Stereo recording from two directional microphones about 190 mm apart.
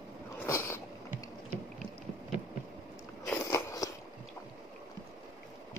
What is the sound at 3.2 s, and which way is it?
Biting, 15° left (ahead or behind).